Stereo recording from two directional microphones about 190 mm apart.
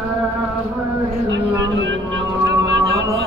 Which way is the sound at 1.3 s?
70° right (ahead or behind).